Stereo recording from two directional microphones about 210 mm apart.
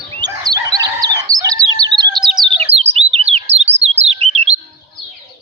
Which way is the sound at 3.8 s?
30° right (ahead or behind).